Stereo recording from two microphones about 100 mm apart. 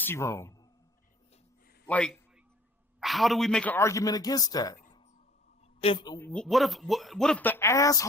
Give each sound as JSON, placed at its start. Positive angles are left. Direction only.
{"t": 0.0, "sound": "speech", "side_deg": 25}
{"t": 1.9, "sound": "a man's voice", "side_deg": 10}
{"t": 3.7, "sound": "speech", "side_deg": 30}
{"t": 5.8, "sound": "speech", "side_deg": 55}
{"t": 6.3, "sound": "speech", "side_deg": 5}
{"t": 7.6, "sound": "speech", "side_deg": 30}